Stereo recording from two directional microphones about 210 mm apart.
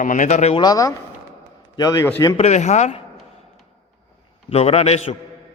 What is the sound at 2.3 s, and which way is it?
Speech, 30° left (ahead or behind).